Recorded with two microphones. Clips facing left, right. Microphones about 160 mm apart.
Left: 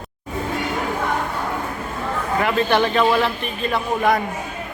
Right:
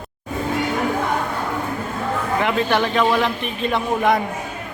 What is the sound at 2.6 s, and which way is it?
Speech, 10° right (ahead or behind).